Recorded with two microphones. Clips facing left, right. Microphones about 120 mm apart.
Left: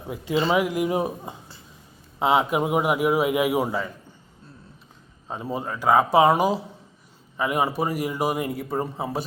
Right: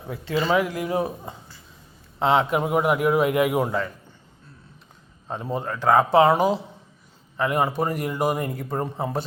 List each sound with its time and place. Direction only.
0.1 s a man's voice: 15° left (ahead or behind)
5.3 s a man's voice: 5° left (ahead or behind)